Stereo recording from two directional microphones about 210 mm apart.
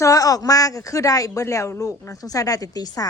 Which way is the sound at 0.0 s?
15° left (ahead or behind).